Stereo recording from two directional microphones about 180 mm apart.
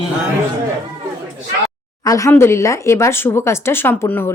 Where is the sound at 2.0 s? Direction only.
15° left (ahead or behind).